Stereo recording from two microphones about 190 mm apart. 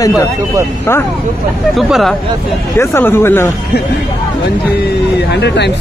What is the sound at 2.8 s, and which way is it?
Speech, 10° left (ahead or behind).